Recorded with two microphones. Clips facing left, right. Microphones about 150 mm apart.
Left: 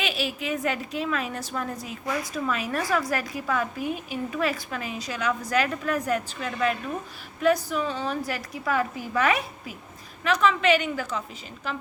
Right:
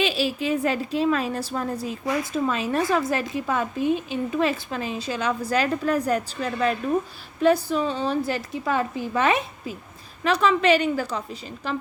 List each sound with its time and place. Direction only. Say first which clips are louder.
0.0 s a woman's voice: right 6 dB; 30° right (ahead or behind)